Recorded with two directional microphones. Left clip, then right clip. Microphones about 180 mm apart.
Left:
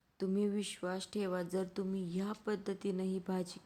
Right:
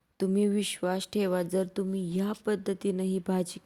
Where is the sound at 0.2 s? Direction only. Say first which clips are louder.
Right 8 dB; 35° right (ahead or behind).